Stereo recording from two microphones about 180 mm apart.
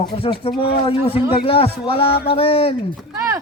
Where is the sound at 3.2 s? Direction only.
15° right (ahead or behind).